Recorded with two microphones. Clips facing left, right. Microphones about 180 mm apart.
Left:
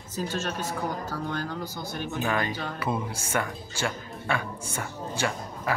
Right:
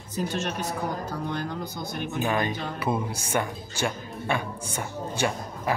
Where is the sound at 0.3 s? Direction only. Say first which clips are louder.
Right 1 dB; 15° right (ahead or behind).